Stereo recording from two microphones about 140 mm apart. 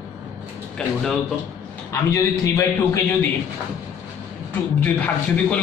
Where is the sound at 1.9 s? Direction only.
20° left (ahead or behind).